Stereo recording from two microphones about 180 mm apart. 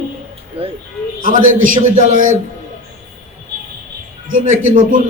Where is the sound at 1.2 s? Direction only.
45° right (ahead or behind).